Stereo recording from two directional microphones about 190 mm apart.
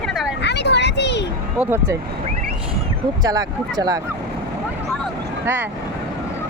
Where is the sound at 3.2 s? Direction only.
20° right (ahead or behind).